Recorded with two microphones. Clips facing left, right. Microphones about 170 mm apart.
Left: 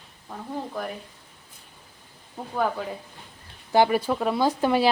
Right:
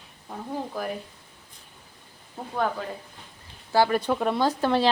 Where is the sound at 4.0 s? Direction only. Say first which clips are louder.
Even; centre (ahead or behind).